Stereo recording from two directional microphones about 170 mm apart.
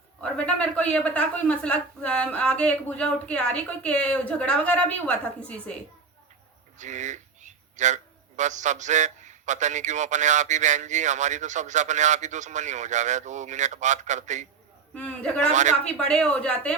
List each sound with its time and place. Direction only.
0.2 s a woman's voice: 5° left (ahead or behind)
6.7 s a man's voice: 45° right (ahead or behind)
14.9 s a man's voice: 5° left (ahead or behind)